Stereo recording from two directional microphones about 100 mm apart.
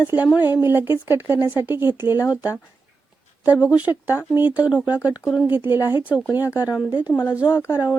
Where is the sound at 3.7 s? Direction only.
15° right (ahead or behind).